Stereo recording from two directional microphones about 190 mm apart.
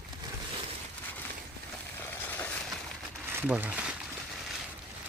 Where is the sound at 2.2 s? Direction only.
10° left (ahead or behind).